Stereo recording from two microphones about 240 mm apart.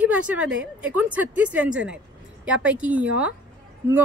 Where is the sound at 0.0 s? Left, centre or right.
Centre.